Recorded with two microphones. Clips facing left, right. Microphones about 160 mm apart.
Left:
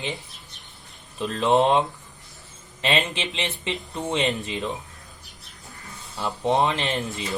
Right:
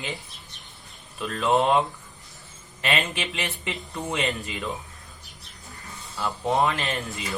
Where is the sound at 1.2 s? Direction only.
20° left (ahead or behind).